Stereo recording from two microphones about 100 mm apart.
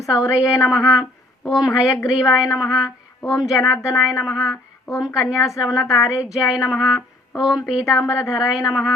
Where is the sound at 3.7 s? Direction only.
35° left (ahead or behind).